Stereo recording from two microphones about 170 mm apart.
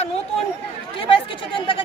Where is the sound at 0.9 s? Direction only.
30° left (ahead or behind).